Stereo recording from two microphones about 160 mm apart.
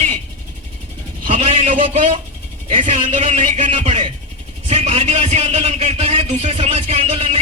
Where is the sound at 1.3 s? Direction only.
50° right (ahead or behind).